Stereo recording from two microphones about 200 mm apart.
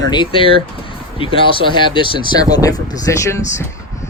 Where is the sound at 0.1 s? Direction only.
25° left (ahead or behind).